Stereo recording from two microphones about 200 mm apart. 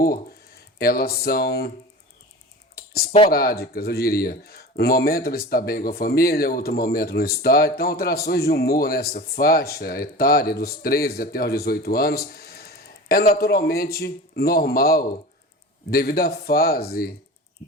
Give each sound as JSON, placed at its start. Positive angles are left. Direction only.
{"t": 0.0, "sound": "speech", "side_deg": 50}
{"t": 2.7, "sound": "computer keyboard", "side_deg": 50}
{"t": 3.2, "sound": "speech", "side_deg": 50}